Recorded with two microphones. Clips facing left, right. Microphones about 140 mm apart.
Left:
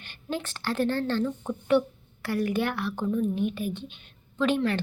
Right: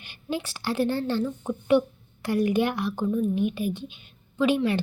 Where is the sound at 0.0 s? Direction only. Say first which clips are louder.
Right 2 dB; 10° right (ahead or behind).